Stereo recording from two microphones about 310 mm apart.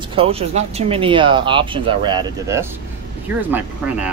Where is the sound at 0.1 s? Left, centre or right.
Centre.